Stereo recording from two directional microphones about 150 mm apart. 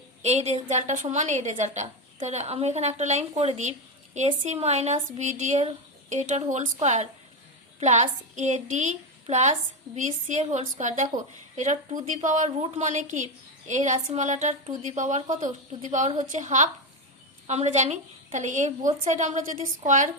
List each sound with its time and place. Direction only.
0.2 s a woman's voice: 45° right (ahead or behind)